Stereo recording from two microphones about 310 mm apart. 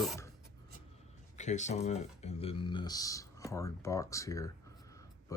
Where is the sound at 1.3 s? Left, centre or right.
Left.